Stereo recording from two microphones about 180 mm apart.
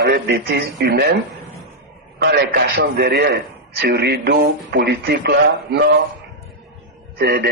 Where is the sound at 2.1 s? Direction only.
60° right (ahead or behind).